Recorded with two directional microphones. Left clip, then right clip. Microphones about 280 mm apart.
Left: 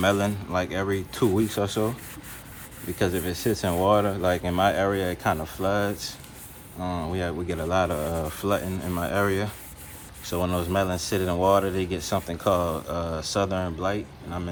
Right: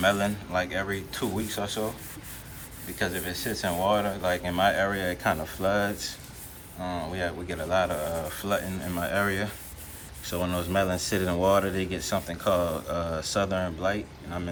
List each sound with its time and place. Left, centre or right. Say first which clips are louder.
0.0 s speech: left 1 dB; left
3.0 s speech: left 4 dB; left